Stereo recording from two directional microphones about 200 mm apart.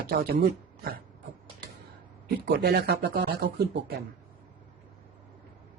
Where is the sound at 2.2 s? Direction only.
50° right (ahead or behind).